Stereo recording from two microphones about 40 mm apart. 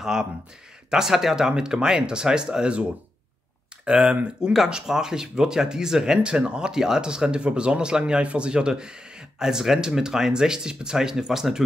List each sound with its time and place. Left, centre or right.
0.0 s speech: centre
3.8 s speech: right
4.4 s speech: centre